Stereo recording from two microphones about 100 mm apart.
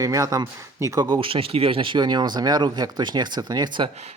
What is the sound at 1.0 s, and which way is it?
Speech, 55° right (ahead or behind).